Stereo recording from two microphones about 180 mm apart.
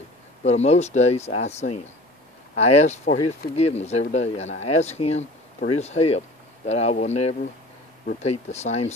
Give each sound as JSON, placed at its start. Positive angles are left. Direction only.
{"t": 0.4, "sound": "speech", "side_deg": 40}